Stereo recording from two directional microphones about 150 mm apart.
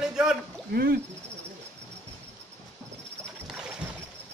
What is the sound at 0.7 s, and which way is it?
Speech, 90° right.